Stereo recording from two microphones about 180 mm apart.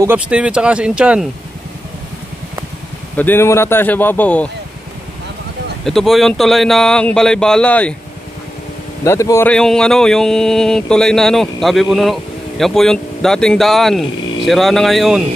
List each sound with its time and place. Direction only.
0.0 s speech: 10° right (ahead or behind)
3.2 s speech: 10° left (ahead or behind)
5.9 s speech: centre (ahead or behind)
9.0 s speech: 15° left (ahead or behind)
9.5 s speech: 5° left (ahead or behind)